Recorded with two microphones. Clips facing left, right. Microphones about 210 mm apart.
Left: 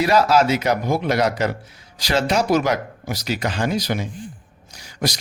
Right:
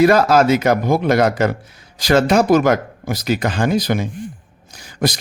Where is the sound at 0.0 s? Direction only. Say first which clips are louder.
Right 4 dB; 50° right (ahead or behind).